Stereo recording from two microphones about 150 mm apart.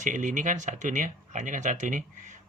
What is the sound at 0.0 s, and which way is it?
Speech, 55° right (ahead or behind).